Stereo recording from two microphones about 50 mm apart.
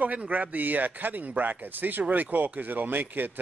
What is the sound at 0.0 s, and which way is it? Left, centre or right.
Speech, right.